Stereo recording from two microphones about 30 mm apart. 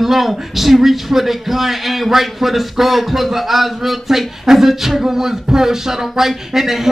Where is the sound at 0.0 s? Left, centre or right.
Centre.